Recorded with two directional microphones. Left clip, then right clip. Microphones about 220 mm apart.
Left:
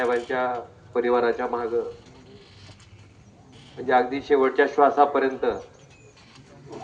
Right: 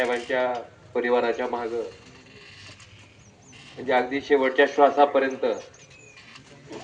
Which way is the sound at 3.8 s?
35° right (ahead or behind).